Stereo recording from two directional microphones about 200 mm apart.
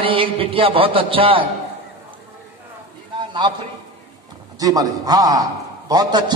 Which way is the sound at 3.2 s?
25° right (ahead or behind).